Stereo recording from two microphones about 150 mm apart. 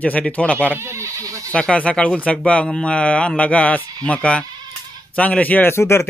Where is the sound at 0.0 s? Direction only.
10° left (ahead or behind).